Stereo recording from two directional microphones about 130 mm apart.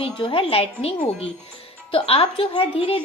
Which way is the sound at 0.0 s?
40° left (ahead or behind).